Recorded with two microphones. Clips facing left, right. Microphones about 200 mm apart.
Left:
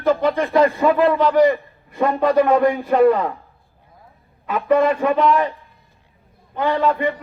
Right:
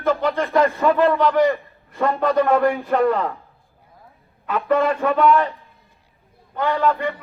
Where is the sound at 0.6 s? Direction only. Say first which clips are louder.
Left 3 dB; 15° left (ahead or behind).